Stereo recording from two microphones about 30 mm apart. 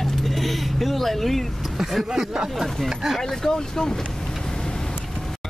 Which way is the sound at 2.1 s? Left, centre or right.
Centre.